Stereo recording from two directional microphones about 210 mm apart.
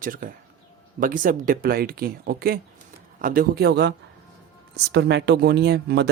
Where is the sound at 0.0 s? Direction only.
40° right (ahead or behind).